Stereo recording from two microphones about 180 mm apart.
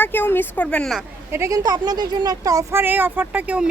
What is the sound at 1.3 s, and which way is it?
Speech, 15° right (ahead or behind).